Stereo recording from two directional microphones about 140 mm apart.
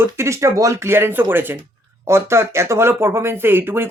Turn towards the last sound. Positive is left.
turn(degrees=-15)  # may be behind; listen again after turning